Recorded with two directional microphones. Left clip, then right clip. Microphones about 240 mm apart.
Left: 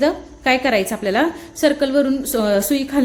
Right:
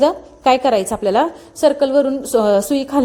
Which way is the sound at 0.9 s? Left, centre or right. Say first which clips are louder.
Right 3 dB; centre.